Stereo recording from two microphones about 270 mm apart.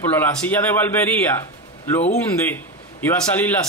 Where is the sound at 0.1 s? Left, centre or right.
Centre.